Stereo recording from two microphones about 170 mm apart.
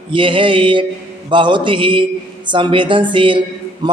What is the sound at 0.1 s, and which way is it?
Mantra, 30° right (ahead or behind).